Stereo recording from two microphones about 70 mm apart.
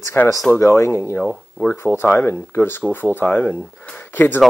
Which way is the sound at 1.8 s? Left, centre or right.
Left.